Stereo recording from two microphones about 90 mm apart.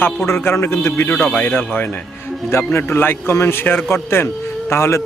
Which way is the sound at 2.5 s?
30° left (ahead or behind).